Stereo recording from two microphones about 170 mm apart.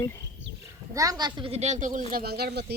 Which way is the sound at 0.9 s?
20° right (ahead or behind).